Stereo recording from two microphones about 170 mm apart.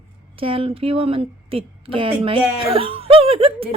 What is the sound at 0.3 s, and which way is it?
Speech, 35° right (ahead or behind).